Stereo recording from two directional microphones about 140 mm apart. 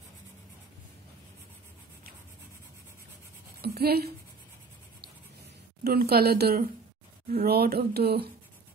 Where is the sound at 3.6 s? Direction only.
90° right.